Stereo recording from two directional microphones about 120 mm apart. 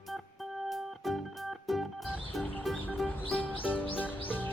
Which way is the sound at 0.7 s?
Centre (ahead or behind).